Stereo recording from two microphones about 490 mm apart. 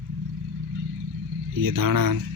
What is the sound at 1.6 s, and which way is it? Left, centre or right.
Speech, right.